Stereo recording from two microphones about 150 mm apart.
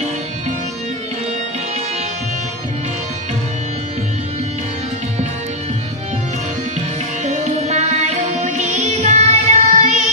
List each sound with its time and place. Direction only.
7.2 s music: 45° right (ahead or behind)